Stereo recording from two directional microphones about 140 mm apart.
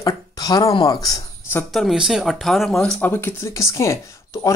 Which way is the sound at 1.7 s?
Centre (ahead or behind).